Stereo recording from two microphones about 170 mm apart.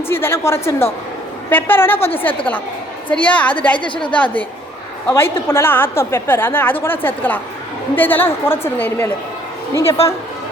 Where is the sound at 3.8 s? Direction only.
30° left (ahead or behind).